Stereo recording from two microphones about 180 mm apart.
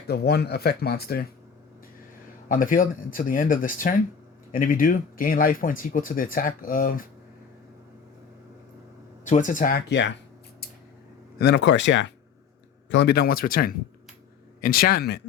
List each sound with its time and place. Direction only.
0.1 s speech: 60° left (ahead or behind)
2.5 s speech: 50° left (ahead or behind)
9.2 s speech: 45° left (ahead or behind)
11.3 s speech: 70° left (ahead or behind); by 12.1 s 85° left
12.9 s speech: 70° left (ahead or behind)